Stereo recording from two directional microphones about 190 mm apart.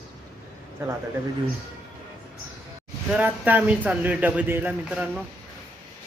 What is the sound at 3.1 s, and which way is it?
Speech, 10° right (ahead or behind).